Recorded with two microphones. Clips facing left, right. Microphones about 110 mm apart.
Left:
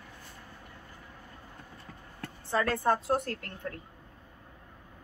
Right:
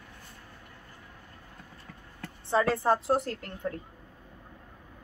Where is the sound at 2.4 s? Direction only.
25° right (ahead or behind).